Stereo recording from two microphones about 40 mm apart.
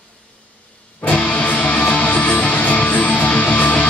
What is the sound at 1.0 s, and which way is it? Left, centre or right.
Music, left.